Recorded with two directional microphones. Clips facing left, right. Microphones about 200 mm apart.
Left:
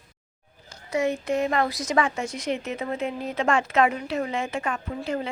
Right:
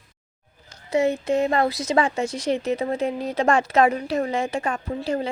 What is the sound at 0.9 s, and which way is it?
Speech, 30° right (ahead or behind).